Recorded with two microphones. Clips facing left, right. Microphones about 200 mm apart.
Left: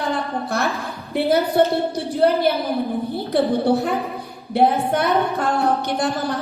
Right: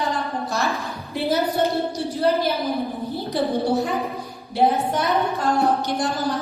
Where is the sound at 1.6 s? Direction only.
60° left (ahead or behind).